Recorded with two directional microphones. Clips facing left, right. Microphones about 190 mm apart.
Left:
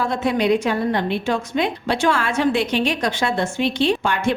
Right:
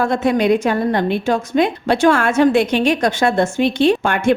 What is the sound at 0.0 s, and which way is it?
A woman's voice, 50° right (ahead or behind).